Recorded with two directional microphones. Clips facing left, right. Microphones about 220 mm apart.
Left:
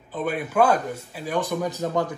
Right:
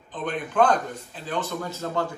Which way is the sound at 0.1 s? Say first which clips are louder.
Left 3 dB; 10° left (ahead or behind).